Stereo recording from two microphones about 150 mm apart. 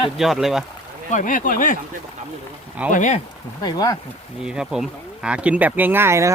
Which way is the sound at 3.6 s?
25° left (ahead or behind).